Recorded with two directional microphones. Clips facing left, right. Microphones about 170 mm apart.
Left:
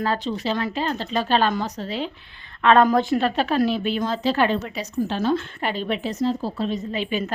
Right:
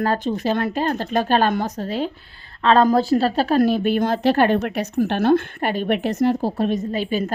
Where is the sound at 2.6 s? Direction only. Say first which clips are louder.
Right 1 dB; 30° right (ahead or behind).